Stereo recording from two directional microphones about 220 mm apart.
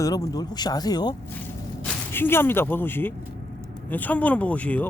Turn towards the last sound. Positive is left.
turn(degrees=5)  # may be behind; listen again after turning